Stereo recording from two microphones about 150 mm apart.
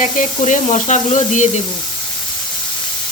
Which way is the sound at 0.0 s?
55° left (ahead or behind).